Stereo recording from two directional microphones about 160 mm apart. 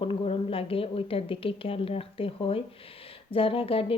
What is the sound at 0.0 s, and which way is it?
Speech, 35° left (ahead or behind).